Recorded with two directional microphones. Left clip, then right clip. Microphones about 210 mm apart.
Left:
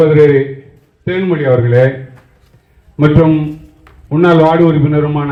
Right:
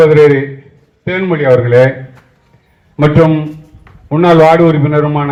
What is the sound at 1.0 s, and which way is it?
Speech, 30° right (ahead or behind).